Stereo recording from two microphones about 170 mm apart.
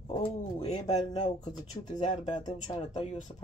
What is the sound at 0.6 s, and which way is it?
Speech, 40° left (ahead or behind).